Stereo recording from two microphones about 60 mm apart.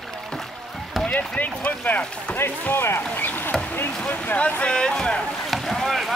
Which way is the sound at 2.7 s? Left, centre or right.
Left.